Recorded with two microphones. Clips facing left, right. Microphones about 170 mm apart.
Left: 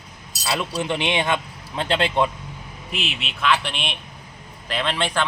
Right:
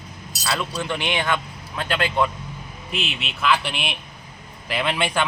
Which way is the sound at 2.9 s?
Centre (ahead or behind).